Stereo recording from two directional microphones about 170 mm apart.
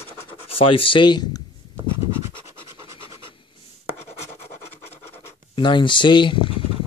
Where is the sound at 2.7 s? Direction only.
30° left (ahead or behind).